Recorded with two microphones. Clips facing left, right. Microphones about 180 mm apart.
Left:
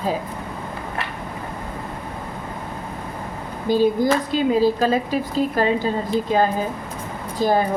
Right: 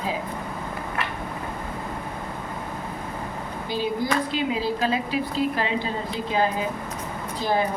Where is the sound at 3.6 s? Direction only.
45° left (ahead or behind).